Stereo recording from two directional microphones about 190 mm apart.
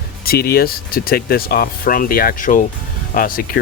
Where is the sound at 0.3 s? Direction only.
55° left (ahead or behind).